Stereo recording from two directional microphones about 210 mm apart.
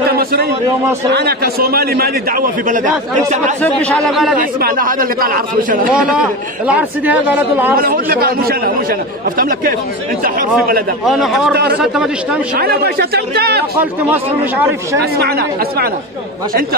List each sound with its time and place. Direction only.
0.1 s a sound: 45° right (ahead or behind)
1.1 s a man's voice: 45° right (ahead or behind)
3.6 s speech: 5° left (ahead or behind)
4.4 s a man's voice: 45° right (ahead or behind)
5.9 s a man's voice: 5° right (ahead or behind)
7.7 s a man's voice: 45° right (ahead or behind)
11.1 s speech: centre (ahead or behind)
12.5 s a man's voice: 45° right (ahead or behind)
14.1 s a man's voice: 10° right (ahead or behind)
15.0 s a man's voice: 50° right (ahead or behind)